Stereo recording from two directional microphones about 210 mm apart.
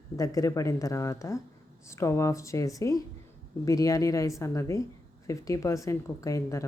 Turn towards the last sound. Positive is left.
turn(degrees=15)  # may be behind; listen again after turning